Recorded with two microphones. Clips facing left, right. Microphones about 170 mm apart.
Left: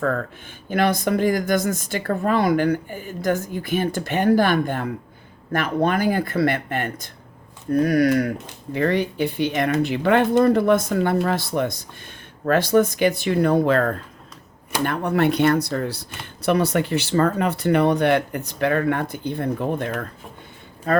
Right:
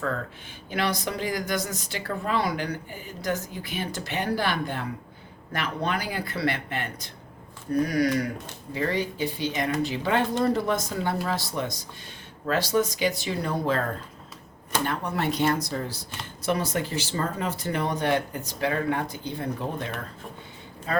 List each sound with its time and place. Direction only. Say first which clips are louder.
0.7 s speech: left 8 dB; 50° left (ahead or behind)